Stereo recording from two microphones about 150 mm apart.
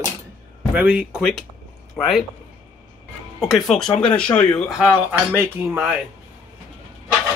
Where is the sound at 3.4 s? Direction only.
Centre (ahead or behind).